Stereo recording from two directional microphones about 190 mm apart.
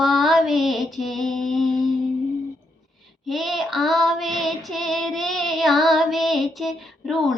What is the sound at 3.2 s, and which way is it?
Child singing, centre (ahead or behind).